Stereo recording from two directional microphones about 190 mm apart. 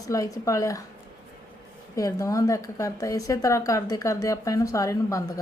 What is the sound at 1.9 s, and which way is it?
A woman's voice, 15° left (ahead or behind).